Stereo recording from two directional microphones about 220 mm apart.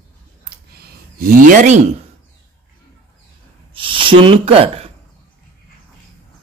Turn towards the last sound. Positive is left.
turn(degrees=-25)  # may be behind; listen again after turning